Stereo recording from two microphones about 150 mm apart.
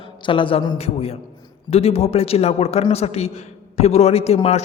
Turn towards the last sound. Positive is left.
turn(degrees=45)  # may be behind; listen again after turning